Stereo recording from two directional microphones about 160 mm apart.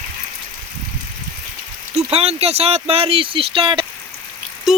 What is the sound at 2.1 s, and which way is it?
Speech, 40° right (ahead or behind).